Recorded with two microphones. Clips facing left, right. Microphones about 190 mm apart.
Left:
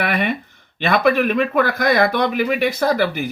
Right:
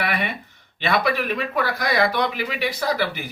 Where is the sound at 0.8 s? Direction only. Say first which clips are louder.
Left 6 dB; 50° left (ahead or behind).